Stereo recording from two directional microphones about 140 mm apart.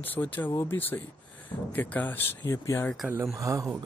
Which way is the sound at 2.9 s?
5° right (ahead or behind).